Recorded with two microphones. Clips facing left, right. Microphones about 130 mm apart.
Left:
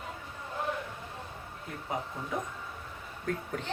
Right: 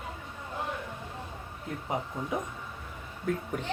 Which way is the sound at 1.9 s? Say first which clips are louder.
Right 2 dB; 20° right (ahead or behind).